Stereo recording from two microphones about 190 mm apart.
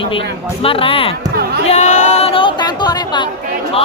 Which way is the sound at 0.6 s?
30° left (ahead or behind).